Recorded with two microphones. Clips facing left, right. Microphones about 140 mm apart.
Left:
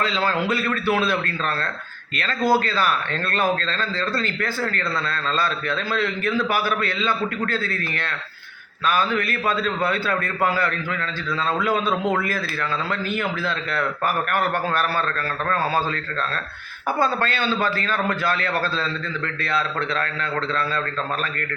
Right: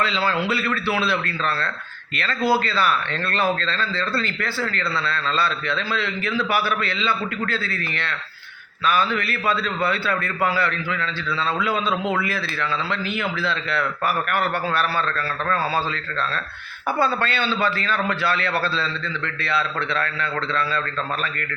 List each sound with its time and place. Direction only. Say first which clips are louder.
0.3 s a man's voice: even; 45° left (ahead or behind)
17.0 s a man's voice: even; 45° left (ahead or behind)